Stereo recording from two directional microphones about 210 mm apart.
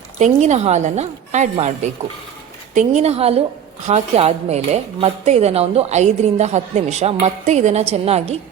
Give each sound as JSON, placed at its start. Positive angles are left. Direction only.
{"t": 0.2, "sound": "speech", "side_deg": -35}